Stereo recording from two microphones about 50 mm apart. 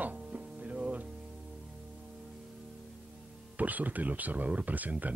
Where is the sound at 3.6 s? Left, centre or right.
Right.